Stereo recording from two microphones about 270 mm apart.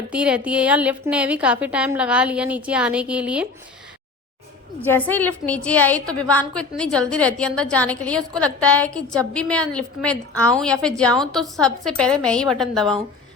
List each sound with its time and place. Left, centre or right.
0.1 s a woman's voice: centre
4.8 s a woman's voice: centre